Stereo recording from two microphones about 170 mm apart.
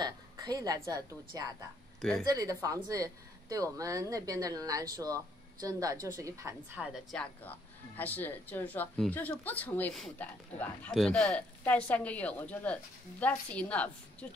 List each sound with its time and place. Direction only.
0.0 s a woman's voice: 25° right (ahead or behind)
2.0 s speech: 5° left (ahead or behind)
2.2 s speech: 20° right (ahead or behind)
7.1 s speech: 5° left (ahead or behind)